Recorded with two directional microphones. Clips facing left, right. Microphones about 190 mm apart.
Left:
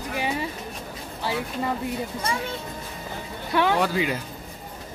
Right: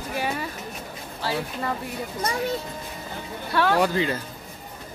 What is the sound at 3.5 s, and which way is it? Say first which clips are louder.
Speech: right 1 dB; 15° left (ahead or behind).